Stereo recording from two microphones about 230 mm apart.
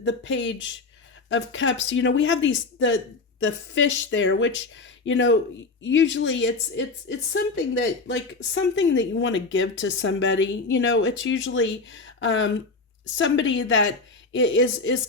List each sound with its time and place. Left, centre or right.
0.0 s speech: left